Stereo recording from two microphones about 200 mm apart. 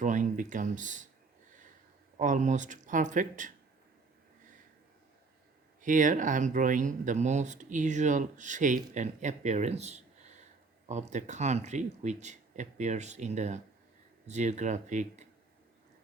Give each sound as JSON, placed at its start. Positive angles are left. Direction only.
{"t": 0.0, "sound": "speech", "side_deg": -40}
{"t": 2.1, "sound": "speech", "side_deg": -40}
{"t": 5.8, "sound": "speech", "side_deg": -40}